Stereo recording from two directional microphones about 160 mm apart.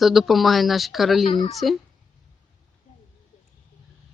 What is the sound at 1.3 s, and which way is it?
Speech, 35° left (ahead or behind).